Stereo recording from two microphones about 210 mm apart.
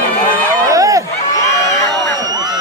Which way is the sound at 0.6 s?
15° right (ahead or behind).